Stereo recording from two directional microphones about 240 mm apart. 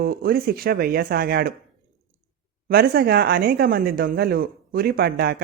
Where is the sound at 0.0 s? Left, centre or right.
Right.